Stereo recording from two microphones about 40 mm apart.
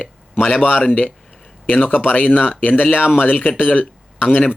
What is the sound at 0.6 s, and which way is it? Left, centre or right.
Speech, left.